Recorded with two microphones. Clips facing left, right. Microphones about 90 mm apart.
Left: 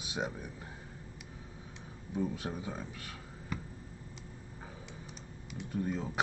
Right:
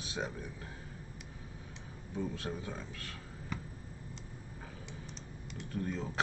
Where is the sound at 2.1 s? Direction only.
15° left (ahead or behind).